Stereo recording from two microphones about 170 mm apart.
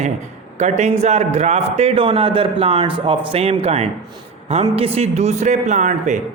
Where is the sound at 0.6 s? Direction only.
40° right (ahead or behind).